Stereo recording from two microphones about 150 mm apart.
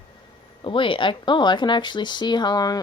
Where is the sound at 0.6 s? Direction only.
35° left (ahead or behind).